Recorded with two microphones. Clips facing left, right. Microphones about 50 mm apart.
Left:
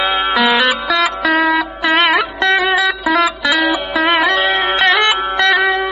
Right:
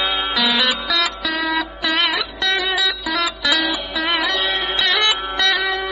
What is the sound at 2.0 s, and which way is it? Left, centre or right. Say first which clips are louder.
Music: left 7 dB; left.